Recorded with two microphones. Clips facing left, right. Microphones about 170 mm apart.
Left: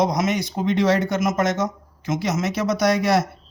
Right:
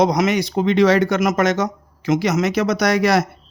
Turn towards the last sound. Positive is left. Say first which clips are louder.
# right 2 dB
turn(degrees=-80)